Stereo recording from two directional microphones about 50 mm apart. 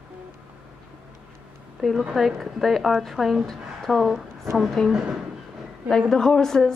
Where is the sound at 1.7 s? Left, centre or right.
Centre.